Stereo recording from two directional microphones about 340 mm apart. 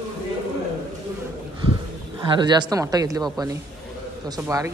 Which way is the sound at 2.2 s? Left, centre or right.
Centre.